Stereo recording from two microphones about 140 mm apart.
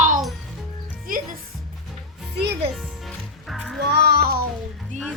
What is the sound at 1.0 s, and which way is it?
Music, 85° right.